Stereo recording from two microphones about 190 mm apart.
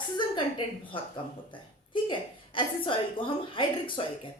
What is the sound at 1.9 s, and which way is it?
A woman's voice, 25° left (ahead or behind).